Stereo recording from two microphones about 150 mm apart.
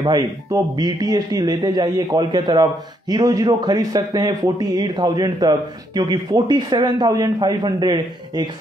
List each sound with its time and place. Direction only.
0.0 s a man's voice: 30° right (ahead or behind)